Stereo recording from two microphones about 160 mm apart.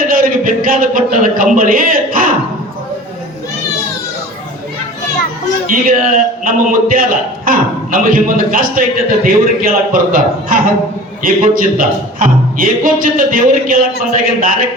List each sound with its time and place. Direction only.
0.0 s speech: 60° right (ahead or behind)
5.7 s a man's voice: 60° right (ahead or behind)